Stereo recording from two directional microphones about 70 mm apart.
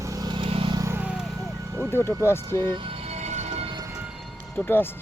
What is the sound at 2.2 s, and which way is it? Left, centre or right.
Speech, left.